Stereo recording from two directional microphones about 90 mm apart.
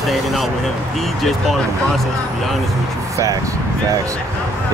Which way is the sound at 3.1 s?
40° right (ahead or behind).